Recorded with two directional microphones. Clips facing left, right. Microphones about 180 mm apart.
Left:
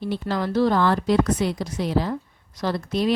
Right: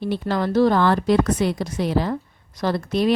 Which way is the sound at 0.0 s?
60° right (ahead or behind).